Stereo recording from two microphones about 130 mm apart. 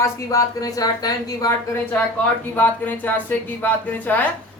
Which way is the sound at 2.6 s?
15° left (ahead or behind).